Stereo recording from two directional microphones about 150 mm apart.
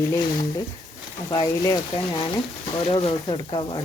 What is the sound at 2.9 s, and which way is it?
Speech, 35° left (ahead or behind).